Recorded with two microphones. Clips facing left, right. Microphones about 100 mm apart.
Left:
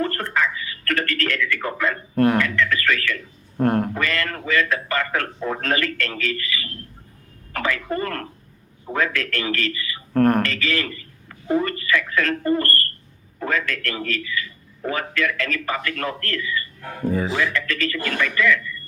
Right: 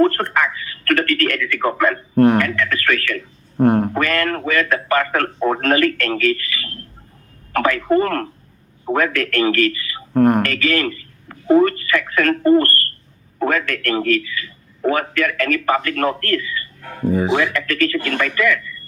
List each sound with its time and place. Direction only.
0.0 s speech: 55° right (ahead or behind)
2.1 s speech: 30° right (ahead or behind)
2.4 s a man's voice: 50° right (ahead or behind)
3.6 s speech: 25° right (ahead or behind)
3.9 s a man's voice: 55° right (ahead or behind)
10.1 s speech: 15° right (ahead or behind)
10.4 s a man's voice: 55° right (ahead or behind)
17.0 s speech: 20° right (ahead or behind)
17.3 s speech: 55° right (ahead or behind)